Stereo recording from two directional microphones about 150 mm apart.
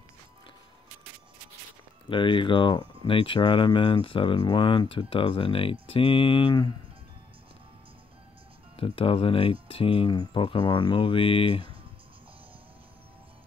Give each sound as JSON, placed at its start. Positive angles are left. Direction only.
{"t": 2.0, "sound": "speech", "side_deg": 35}
{"t": 8.7, "sound": "speech", "side_deg": 40}